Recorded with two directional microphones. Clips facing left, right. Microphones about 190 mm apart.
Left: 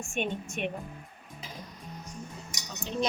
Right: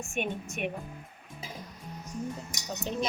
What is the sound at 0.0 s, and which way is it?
Speech, 15° right (ahead or behind).